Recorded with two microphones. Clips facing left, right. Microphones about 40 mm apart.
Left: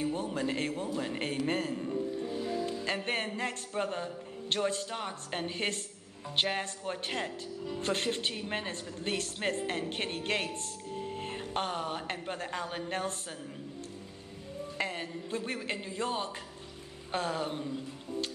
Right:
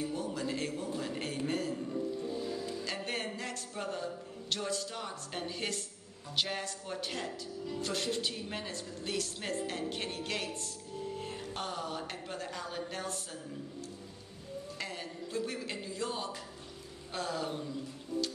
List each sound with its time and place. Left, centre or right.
0.0 s a woman's voice: left
2.1 s music: left
3.3 s a woman's voice: left
14.8 s a woman's voice: left